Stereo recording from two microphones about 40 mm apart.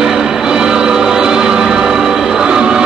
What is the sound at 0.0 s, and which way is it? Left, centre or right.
Music, centre.